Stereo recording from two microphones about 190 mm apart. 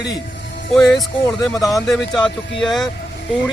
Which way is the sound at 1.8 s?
Centre (ahead or behind).